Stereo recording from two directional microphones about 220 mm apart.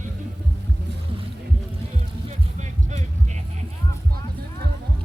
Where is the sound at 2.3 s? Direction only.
30° right (ahead or behind).